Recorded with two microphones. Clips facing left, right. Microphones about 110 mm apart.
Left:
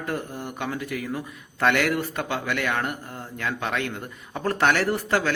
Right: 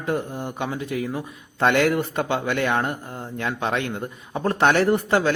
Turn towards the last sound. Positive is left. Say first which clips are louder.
# right 4 dB
turn(degrees=-20)  # may be behind; listen again after turning